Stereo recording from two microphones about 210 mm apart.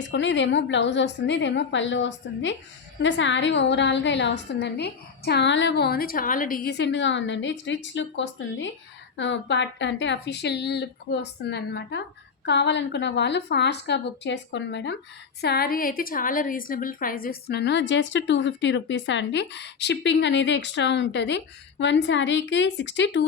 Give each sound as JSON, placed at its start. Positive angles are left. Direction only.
{"t": 0.0, "sound": "a woman's voice", "side_deg": 60}